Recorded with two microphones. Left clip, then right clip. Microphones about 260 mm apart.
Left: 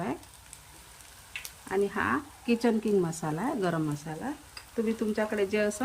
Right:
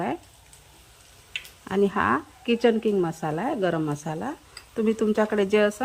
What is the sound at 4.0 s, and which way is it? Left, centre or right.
Speech, right.